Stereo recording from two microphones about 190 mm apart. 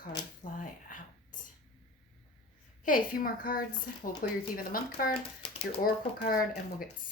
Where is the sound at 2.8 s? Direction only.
45° left (ahead or behind).